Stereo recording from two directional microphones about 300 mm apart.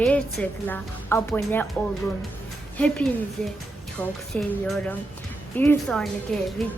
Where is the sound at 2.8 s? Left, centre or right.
Centre.